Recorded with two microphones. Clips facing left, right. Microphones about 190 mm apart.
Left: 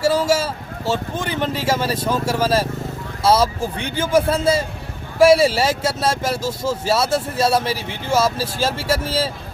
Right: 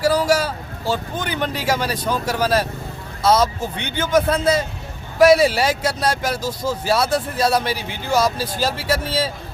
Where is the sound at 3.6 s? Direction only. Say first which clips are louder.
Left 2 dB; 30° left (ahead or behind).